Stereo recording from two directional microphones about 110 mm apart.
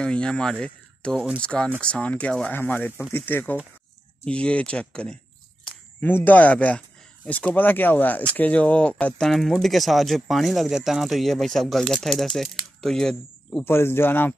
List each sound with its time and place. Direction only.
0.0 s speech: 10° left (ahead or behind)
13.7 s speech: 20° left (ahead or behind)